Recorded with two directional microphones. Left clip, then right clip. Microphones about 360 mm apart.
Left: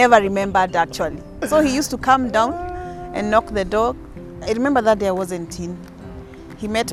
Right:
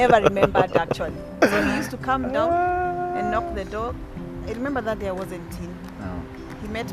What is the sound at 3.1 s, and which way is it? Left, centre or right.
Speech, left.